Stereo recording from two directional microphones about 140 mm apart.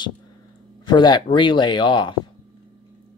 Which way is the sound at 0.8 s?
30° left (ahead or behind).